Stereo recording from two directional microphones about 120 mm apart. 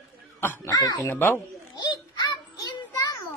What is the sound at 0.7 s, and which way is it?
Speech, 35° left (ahead or behind).